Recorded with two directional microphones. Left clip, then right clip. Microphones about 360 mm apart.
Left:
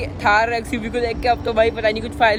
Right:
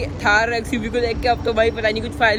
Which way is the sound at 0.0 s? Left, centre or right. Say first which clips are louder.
Left 1 dB; centre.